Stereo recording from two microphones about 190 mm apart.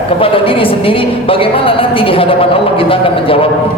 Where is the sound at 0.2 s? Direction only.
30° left (ahead or behind).